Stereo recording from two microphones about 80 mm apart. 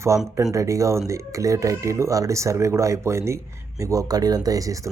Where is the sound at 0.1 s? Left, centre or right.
Right.